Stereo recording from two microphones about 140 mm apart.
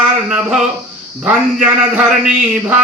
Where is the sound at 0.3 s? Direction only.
10° right (ahead or behind).